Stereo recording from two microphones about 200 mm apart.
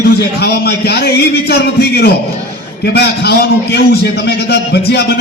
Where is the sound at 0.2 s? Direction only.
55° left (ahead or behind).